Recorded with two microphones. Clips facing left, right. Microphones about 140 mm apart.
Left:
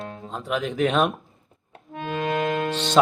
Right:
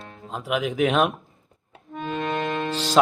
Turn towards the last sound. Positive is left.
turn(degrees=-5)  # may be behind; listen again after turning